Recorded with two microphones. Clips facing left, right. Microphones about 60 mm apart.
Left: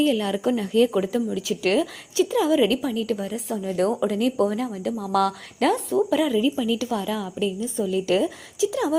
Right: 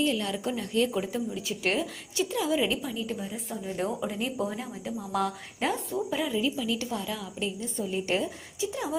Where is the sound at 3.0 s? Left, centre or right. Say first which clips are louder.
Left 8 dB; left.